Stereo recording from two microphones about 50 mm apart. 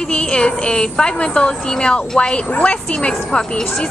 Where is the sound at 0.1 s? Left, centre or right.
Left.